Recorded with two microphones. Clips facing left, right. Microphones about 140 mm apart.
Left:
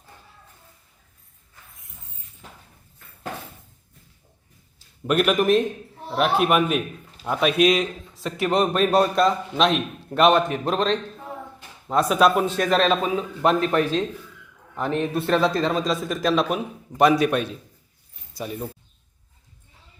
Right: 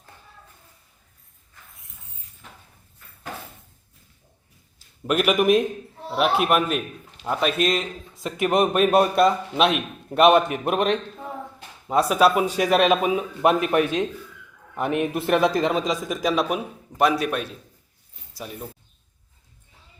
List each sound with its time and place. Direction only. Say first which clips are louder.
5.0 s a man's voice: even; 5° right (ahead or behind)
8.4 s a man's voice: right 1 dB; 10° right (ahead or behind)
15.1 s a man's voice: even; 20° right (ahead or behind); by 17.6 s centre (ahead or behind)